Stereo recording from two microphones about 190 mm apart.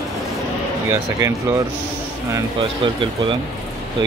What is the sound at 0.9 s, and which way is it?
Speech, 15° right (ahead or behind).